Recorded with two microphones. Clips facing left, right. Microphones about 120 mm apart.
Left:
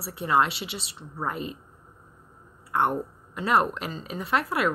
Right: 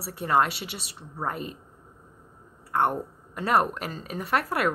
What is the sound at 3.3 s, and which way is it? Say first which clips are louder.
A woman's voice: even; 45° right (ahead or behind).